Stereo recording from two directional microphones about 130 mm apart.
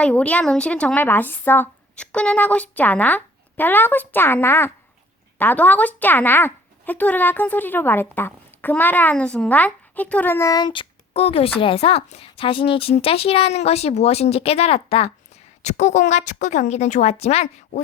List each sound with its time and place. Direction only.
0.0 s speech: 10° left (ahead or behind)
10.5 s speech: 35° left (ahead or behind); by 17.8 s 55° left (ahead or behind)